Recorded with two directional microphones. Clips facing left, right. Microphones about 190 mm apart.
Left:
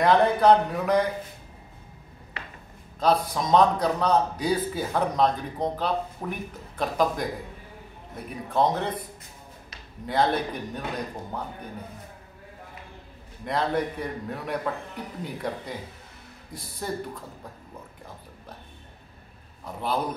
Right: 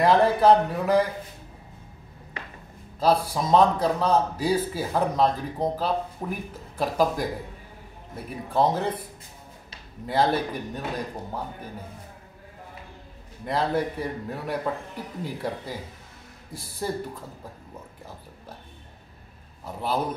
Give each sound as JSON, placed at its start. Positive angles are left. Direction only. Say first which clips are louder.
{"t": 0.0, "sound": "a man's voice", "louder": "right 1 dB", "side_deg": -5}
{"t": 3.0, "sound": "a man's voice", "louder": "right 1 dB", "side_deg": -5}
{"t": 8.5, "sound": "a man's voice", "louder": "right 1 dB", "side_deg": -5}
{"t": 10.0, "sound": "a man's voice", "louder": "right 1 dB", "side_deg": -5}
{"t": 13.5, "sound": "a man's voice", "louder": "right 1 dB", "side_deg": -5}
{"t": 19.6, "sound": "a man's voice", "louder": "right 1 dB", "side_deg": -5}